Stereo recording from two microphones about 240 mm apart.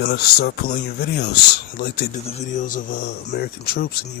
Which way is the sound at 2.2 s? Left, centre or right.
Left.